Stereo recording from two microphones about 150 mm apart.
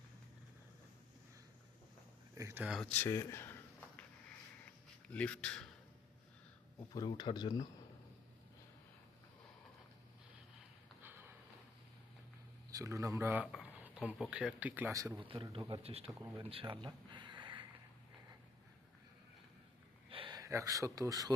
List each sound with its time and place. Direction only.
2.3 s speech: 20° right (ahead or behind)
2.6 s speech: centre (ahead or behind)
2.9 s a sound: 15° left (ahead or behind)
5.0 s speech: 10° left (ahead or behind)
6.9 s speech: 25° left (ahead or behind)
12.7 s speech: 20° right (ahead or behind)
15.2 s a man's voice: 35° right (ahead or behind)
16.4 s a sound: 35° right (ahead or behind)
20.1 s speech: 35° right (ahead or behind)